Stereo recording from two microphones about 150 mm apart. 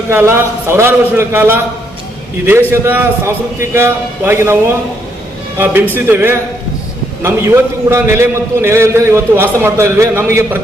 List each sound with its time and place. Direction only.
0.1 s a man's voice: 15° right (ahead or behind)
5.9 s a man's voice: 15° right (ahead or behind)